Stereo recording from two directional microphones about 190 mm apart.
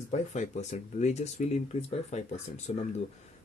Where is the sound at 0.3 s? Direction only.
35° left (ahead or behind).